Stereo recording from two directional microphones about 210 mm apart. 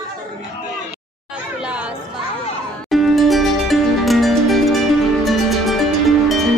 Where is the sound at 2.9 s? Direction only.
Centre (ahead or behind).